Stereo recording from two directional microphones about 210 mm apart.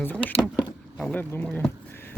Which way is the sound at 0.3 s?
20° left (ahead or behind).